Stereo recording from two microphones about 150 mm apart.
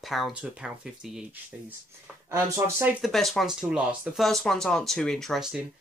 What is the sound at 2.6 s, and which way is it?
Speech, 15° right (ahead or behind).